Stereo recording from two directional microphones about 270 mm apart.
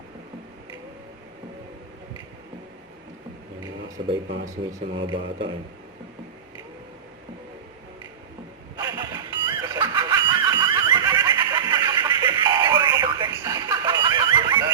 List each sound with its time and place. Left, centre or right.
3.6 s a sound: centre
5.0 s speech: centre
8.7 s snicker: centre